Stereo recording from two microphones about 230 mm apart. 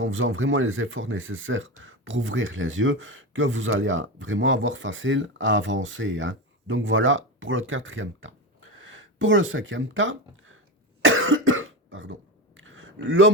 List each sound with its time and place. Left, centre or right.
0.0 s speech: right
11.0 s cough: right
12.5 s a sound: right